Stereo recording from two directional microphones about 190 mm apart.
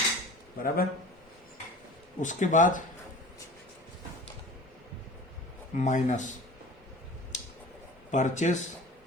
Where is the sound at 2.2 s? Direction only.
40° left (ahead or behind).